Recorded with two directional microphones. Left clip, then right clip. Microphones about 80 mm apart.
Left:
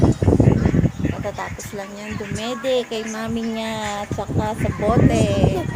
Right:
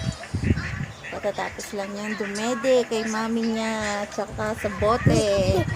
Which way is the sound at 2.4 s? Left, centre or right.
Right.